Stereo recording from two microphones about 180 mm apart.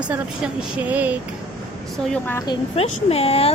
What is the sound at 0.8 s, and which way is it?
Speech, 10° right (ahead or behind).